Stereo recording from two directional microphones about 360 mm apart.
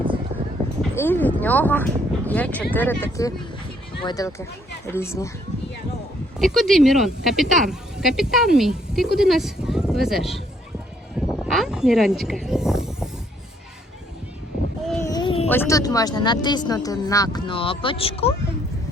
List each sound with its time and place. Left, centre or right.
0.8 s speech: centre
6.4 s speech: centre
11.4 s speech: centre
14.8 s speech: centre